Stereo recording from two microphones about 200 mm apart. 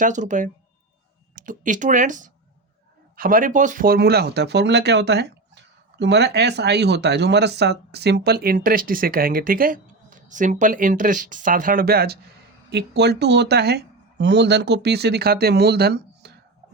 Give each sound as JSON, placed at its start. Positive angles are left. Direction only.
{"t": 0.0, "sound": "speech", "side_deg": -40}